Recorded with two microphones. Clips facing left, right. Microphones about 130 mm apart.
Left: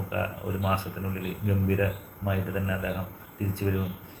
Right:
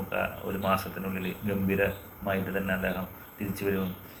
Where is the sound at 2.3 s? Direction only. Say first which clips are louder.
Right 1 dB; 25° left (ahead or behind).